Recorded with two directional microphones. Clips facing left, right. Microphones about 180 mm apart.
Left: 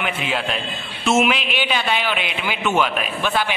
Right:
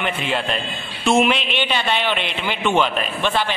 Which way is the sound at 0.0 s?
5° left (ahead or behind).